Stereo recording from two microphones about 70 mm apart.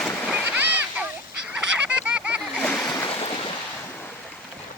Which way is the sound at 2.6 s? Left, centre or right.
Centre.